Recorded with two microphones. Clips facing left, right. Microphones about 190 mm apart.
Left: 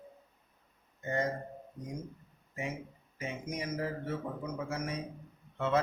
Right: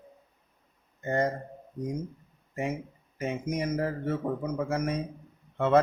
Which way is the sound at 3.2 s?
55° right (ahead or behind).